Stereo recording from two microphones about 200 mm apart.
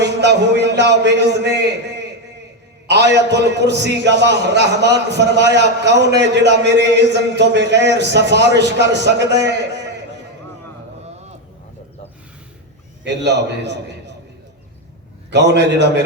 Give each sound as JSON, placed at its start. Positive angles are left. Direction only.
{"t": 0.0, "sound": "a man's voice", "side_deg": -60}
{"t": 13.2, "sound": "a man's voice", "side_deg": -60}
{"t": 15.3, "sound": "a man's voice", "side_deg": -60}